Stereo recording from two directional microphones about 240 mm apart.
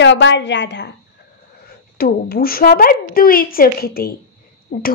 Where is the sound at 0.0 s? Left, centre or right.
Left.